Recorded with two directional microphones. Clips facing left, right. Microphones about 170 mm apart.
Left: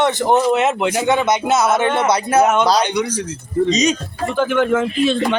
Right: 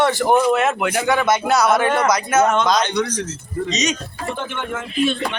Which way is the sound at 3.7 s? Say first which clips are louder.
Left 5 dB; 35° left (ahead or behind).